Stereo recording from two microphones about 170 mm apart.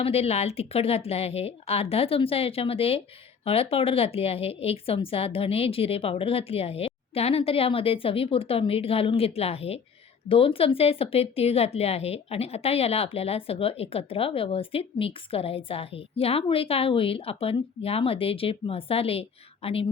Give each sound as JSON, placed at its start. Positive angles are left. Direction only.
{"t": 0.0, "sound": "a woman's voice", "side_deg": 35}